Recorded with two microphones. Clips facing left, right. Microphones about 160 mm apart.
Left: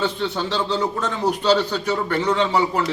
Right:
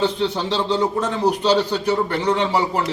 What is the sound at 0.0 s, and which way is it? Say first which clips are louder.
A man's voice: right 3 dB; 15° right (ahead or behind).